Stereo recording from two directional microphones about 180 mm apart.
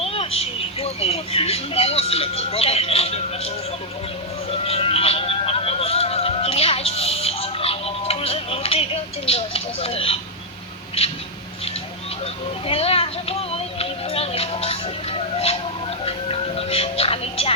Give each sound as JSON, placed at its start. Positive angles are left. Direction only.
{"t": 0.0, "sound": "speech", "side_deg": 30}
{"t": 4.5, "sound": "a sound", "side_deg": 35}
{"t": 12.2, "sound": "music", "side_deg": 35}